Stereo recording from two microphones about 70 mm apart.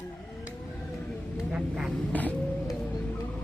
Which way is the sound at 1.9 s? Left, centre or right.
Left.